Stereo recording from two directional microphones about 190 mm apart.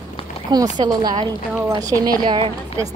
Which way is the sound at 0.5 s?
20° right (ahead or behind).